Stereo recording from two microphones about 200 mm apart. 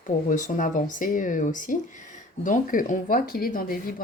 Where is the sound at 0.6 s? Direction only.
40° left (ahead or behind).